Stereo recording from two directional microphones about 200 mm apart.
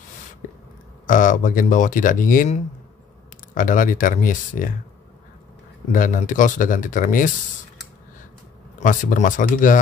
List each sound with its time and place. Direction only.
1.0 s speech: 40° left (ahead or behind)
5.9 s speech: 40° left (ahead or behind)
8.7 s speech: 40° left (ahead or behind)